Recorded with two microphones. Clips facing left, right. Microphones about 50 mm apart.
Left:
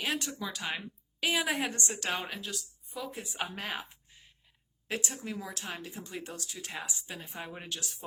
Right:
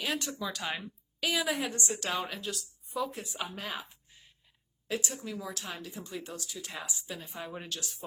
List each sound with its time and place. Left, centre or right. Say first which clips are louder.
0.0 s speech: even; left
0.3 s speech: right 1 dB; centre
1.2 s speech: left 1 dB; left
2.4 s a woman's voice: right 2 dB; centre
3.2 s speech: left 1 dB; left